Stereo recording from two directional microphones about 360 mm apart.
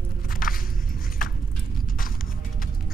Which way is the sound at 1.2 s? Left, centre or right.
Left.